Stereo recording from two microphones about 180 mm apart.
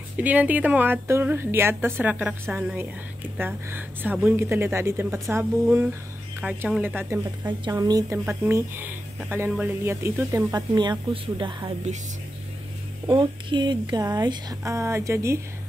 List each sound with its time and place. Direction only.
0.2 s speech: 10° right (ahead or behind); by 11.7 s 25° right (ahead or behind)
13.1 s speech: 25° right (ahead or behind)